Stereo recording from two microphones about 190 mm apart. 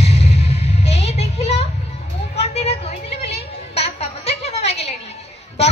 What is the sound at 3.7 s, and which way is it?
Music, 30° left (ahead or behind).